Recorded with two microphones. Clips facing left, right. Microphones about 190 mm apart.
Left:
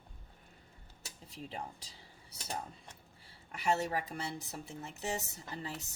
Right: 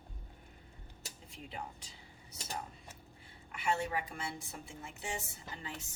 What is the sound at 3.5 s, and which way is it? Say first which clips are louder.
Speech: left 2 dB; 40° left (ahead or behind).